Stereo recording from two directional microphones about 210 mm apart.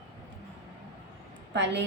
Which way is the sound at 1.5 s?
55° right (ahead or behind).